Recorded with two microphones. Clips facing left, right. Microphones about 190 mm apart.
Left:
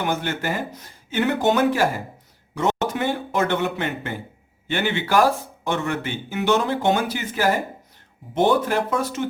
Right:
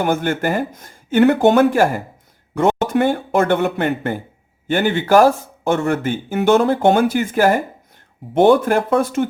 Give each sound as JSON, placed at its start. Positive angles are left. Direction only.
{"t": 0.0, "sound": "speech", "side_deg": -50}